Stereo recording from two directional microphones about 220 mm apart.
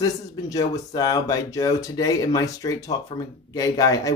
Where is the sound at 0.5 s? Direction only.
15° left (ahead or behind).